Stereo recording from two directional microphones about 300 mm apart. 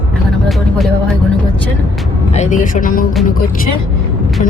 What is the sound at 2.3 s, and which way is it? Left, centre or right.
Speech, left.